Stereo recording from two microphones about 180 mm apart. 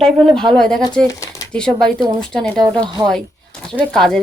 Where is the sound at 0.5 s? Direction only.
Centre (ahead or behind).